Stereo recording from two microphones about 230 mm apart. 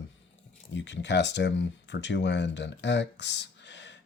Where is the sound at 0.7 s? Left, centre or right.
Left.